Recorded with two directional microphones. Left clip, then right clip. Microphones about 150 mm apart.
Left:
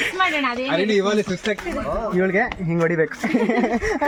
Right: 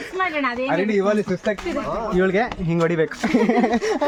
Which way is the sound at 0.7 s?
45° right (ahead or behind).